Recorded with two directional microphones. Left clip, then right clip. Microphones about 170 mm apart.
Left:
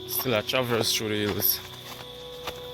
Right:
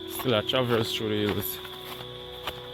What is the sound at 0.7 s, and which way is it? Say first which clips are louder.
Speech: left 1 dB; centre (ahead or behind).